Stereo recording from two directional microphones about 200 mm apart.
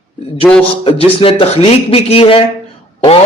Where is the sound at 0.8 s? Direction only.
30° left (ahead or behind).